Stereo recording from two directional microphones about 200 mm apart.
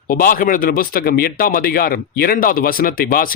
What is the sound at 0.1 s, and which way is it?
Speech, 45° left (ahead or behind).